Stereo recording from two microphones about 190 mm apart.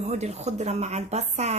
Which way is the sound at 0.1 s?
35° right (ahead or behind).